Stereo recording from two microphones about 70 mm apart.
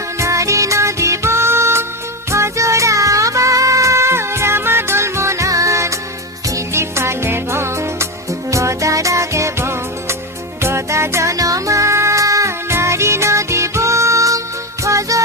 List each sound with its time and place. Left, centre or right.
0.2 s music: right